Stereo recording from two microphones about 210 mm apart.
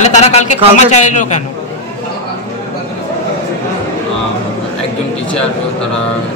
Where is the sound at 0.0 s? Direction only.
30° left (ahead or behind).